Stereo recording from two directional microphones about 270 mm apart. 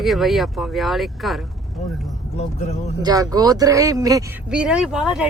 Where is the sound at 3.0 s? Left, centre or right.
Centre.